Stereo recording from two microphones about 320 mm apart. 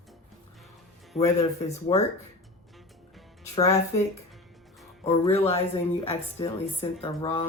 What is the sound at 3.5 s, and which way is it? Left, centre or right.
Speech, centre.